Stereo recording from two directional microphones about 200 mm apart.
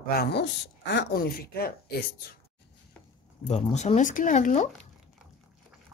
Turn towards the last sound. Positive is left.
turn(degrees=40)  # may be behind; listen again after turning